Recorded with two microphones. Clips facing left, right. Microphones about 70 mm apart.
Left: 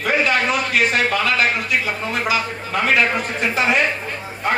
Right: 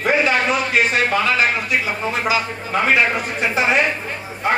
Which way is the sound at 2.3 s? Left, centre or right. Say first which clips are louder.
Right 1 dB; right.